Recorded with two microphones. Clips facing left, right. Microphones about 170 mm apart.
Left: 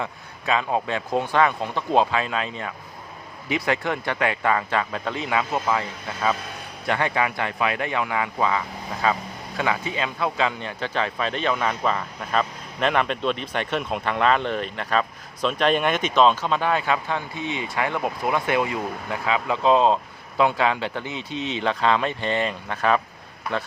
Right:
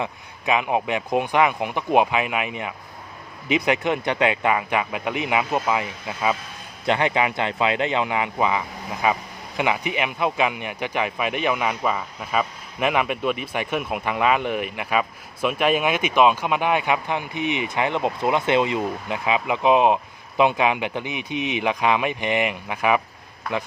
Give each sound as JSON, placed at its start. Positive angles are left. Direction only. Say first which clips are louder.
{"t": 0.0, "sound": "speech", "louder": "right 2 dB", "side_deg": -15}